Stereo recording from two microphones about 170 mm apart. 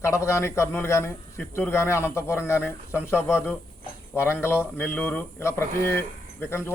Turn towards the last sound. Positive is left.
turn(degrees=15)  # may be behind; listen again after turning